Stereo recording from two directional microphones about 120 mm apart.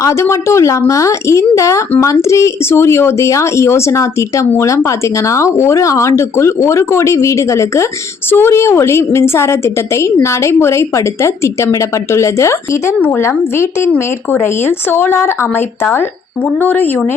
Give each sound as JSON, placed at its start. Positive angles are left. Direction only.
{"t": 0.0, "sound": "speech", "side_deg": 25}